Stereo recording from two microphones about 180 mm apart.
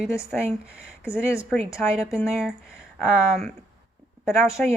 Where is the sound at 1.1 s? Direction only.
15° left (ahead or behind).